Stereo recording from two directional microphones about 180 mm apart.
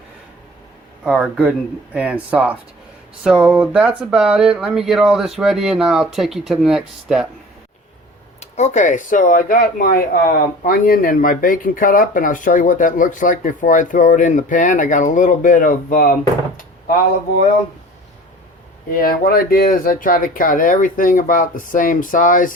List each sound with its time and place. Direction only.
1.0 s speech: 5° right (ahead or behind)
8.4 s speech: 40° left (ahead or behind)
18.9 s speech: 55° left (ahead or behind)